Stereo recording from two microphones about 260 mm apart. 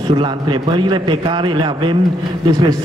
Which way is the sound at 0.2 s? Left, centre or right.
Centre.